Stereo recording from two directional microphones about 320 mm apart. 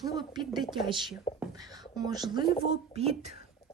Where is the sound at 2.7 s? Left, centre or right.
Centre.